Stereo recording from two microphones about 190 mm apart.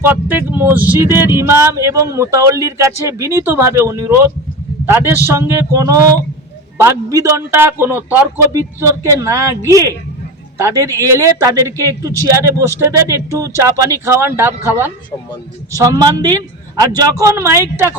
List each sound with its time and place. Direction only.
0.0 s a woman's voice: 10° right (ahead or behind)